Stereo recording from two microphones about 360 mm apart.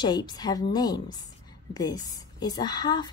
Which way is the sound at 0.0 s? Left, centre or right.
Centre.